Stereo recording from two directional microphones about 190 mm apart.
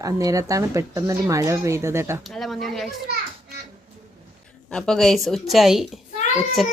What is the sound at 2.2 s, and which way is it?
Speech, centre (ahead or behind).